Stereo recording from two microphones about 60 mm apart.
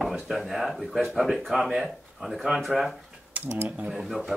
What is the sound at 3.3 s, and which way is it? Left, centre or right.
Typing, right.